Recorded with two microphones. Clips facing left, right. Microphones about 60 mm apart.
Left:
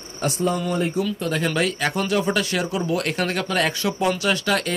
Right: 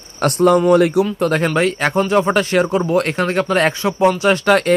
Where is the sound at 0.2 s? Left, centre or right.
Right.